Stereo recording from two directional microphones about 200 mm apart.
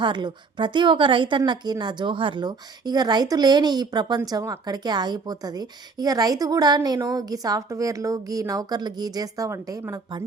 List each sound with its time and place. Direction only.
0.0 s a woman's voice: 25° right (ahead or behind)